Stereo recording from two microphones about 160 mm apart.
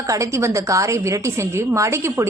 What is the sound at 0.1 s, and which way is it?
A woman's voice, 20° right (ahead or behind).